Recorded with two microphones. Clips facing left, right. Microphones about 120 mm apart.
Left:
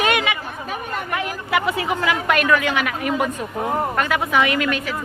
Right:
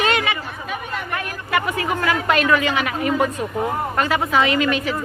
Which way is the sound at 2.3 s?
Centre (ahead or behind).